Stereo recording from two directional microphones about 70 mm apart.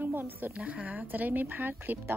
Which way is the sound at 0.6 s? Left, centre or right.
Centre.